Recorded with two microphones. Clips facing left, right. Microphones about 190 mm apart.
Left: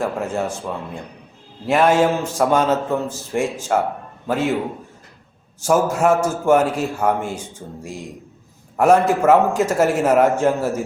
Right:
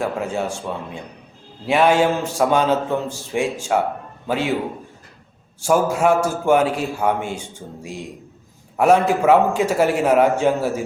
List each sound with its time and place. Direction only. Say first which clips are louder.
0.0 s a man's voice: left 1 dB; centre (ahead or behind)
5.6 s a man's voice: even; centre (ahead or behind)
8.7 s a man's voice: left 1 dB; centre (ahead or behind)